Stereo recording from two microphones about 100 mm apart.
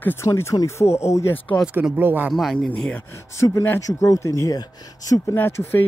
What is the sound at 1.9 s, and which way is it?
Speech, 20° right (ahead or behind).